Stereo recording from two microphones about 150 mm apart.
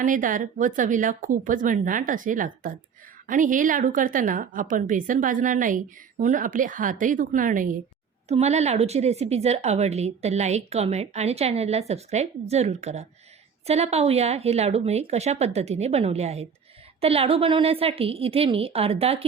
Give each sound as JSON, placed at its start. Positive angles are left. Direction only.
{"t": 0.0, "sound": "a woman's voice", "side_deg": -60}
{"t": 8.3, "sound": "a woman's voice", "side_deg": -45}